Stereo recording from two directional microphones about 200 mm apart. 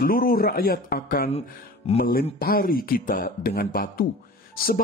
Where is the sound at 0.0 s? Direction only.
45° left (ahead or behind).